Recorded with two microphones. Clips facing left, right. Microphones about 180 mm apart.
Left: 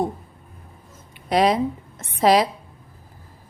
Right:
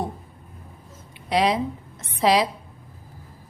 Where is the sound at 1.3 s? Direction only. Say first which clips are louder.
Left 3 dB; 45° left (ahead or behind).